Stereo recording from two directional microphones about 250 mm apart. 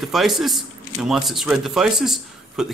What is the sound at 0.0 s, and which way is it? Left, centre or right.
Speech, centre.